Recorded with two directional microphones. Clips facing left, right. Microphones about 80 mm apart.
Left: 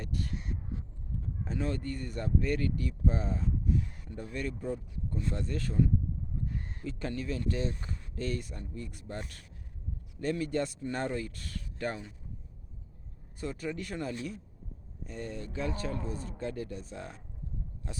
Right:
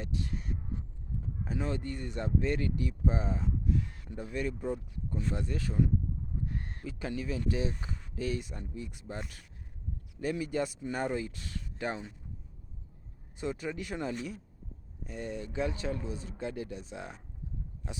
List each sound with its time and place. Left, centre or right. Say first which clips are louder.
1.5 s speech: left 1 dB; centre
13.4 s speech: right 1 dB; centre